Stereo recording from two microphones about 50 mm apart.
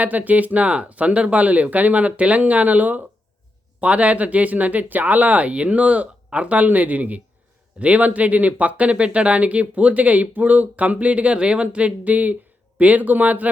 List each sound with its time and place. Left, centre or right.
0.0 s speech: right